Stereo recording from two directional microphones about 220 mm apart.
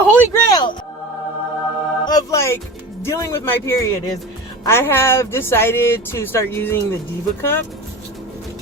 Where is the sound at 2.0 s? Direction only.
15° left (ahead or behind).